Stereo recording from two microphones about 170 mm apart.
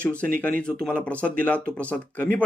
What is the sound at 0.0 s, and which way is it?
Speech, 5° left (ahead or behind).